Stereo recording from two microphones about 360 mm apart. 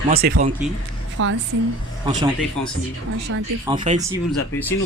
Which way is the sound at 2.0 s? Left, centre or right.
Centre.